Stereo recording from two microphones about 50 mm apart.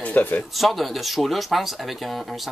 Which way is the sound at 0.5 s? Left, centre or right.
Centre.